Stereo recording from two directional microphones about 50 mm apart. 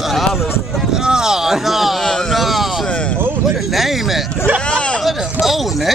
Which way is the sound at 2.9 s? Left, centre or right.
Left.